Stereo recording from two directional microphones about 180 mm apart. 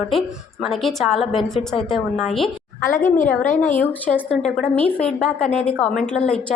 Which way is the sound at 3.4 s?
40° left (ahead or behind).